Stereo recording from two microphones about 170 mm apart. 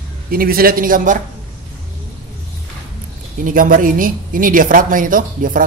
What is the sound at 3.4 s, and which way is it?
A woman's voice, 55° right (ahead or behind).